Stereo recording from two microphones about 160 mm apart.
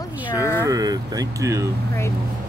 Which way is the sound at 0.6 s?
20° right (ahead or behind).